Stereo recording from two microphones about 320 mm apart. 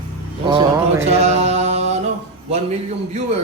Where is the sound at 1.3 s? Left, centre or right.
Centre.